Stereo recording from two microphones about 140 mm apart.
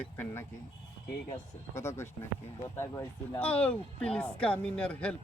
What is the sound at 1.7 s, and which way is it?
Speech, 20° left (ahead or behind).